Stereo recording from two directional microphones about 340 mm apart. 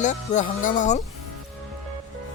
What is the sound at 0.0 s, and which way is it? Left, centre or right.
Speech, left.